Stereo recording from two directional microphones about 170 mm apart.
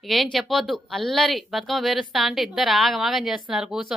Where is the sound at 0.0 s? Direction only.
Centre (ahead or behind).